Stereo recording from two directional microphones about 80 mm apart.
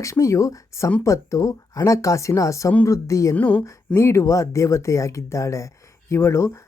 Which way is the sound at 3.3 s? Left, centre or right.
Centre.